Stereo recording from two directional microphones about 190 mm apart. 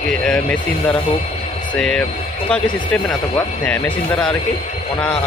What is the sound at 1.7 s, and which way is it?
Speech, 5° left (ahead or behind).